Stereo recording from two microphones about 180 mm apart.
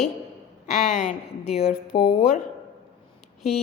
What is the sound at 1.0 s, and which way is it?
A woman's voice, 40° left (ahead or behind).